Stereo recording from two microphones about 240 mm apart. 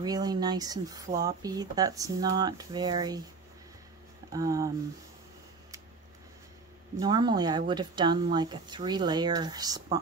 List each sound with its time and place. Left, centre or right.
0.0 s speech: centre
4.3 s speech: centre
7.0 s speech: centre